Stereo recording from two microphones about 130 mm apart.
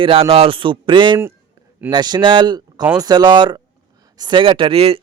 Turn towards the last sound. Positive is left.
turn(degrees=-50)  # may be behind; listen again after turning